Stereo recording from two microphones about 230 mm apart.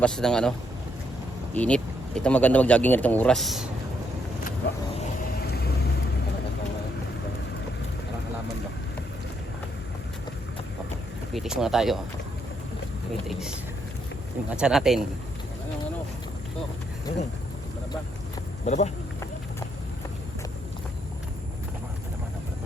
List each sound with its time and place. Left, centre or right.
0.0 s speech: centre
1.5 s speech: centre
5.5 s vehicle: left
11.3 s speech: centre
14.5 s speech: centre
18.6 s speech: left